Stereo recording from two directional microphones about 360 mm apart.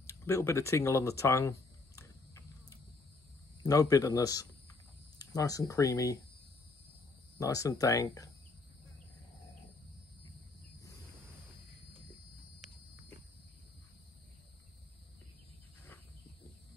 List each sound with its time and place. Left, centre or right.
0.0 s a sound: centre
3.6 s speech: centre
7.3 s speech: centre